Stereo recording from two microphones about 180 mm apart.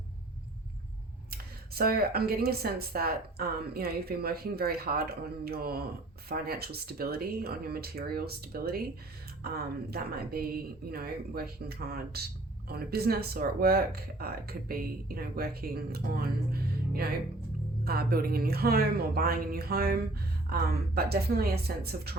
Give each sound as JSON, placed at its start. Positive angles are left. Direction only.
{"t": 1.3, "sound": "speech", "side_deg": -60}
{"t": 9.9, "sound": "speech", "side_deg": -60}